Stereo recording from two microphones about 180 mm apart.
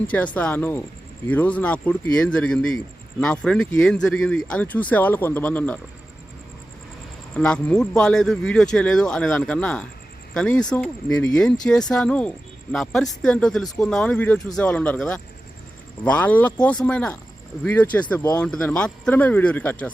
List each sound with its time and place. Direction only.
0.3 s a man's voice: 10° left (ahead or behind)
7.3 s a man's voice: 5° left (ahead or behind)
18.3 s speech: 5° left (ahead or behind)